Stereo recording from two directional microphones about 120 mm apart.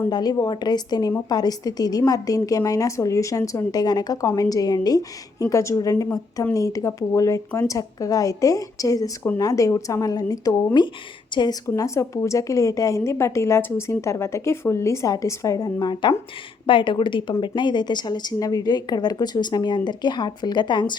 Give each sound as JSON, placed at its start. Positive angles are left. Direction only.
{"t": 0.1, "sound": "a woman's voice", "side_deg": 35}
{"t": 11.6, "sound": "a woman's voice", "side_deg": 25}